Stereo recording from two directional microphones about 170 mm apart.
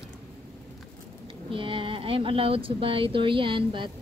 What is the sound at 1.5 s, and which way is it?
Speech, 30° right (ahead or behind).